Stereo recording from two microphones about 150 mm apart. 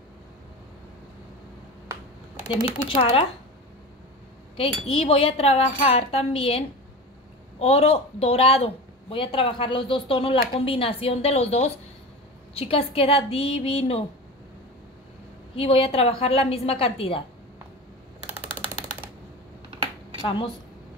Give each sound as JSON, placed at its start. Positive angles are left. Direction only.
{"t": 3.0, "sound": "a woman's voice", "side_deg": 40}
{"t": 4.6, "sound": "a woman's voice", "side_deg": 40}
{"t": 15.5, "sound": "a woman's voice", "side_deg": 40}
{"t": 18.2, "sound": "typewriter", "side_deg": -10}
{"t": 20.2, "sound": "a woman's voice", "side_deg": 35}